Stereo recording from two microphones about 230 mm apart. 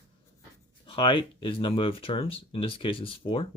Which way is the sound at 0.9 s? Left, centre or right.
Left.